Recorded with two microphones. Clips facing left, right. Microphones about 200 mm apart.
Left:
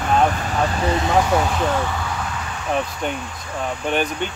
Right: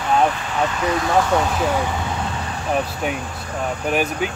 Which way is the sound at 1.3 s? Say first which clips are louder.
Even; centre (ahead or behind).